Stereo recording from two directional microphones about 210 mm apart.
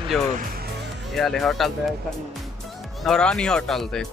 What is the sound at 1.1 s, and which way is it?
Speech, centre (ahead or behind).